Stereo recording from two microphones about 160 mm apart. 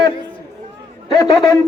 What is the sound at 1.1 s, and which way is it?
Speech, 20° left (ahead or behind).